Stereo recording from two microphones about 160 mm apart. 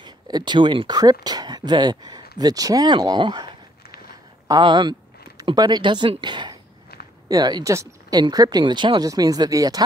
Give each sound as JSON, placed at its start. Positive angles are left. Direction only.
{"t": 0.0, "sound": "speech", "side_deg": -25}